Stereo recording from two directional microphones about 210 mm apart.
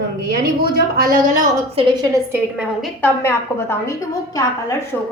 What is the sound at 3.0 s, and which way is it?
A woman's voice, 10° left (ahead or behind).